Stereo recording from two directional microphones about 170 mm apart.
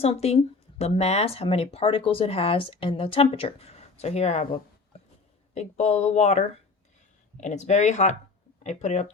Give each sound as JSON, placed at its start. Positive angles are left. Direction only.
{"t": 0.0, "sound": "speech", "side_deg": 35}